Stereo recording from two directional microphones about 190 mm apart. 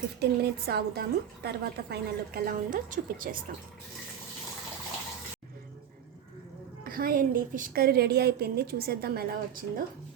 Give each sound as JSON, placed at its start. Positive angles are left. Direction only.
{"t": 0.2, "sound": "a woman's voice", "side_deg": -55}
{"t": 6.8, "sound": "a woman's voice", "side_deg": -50}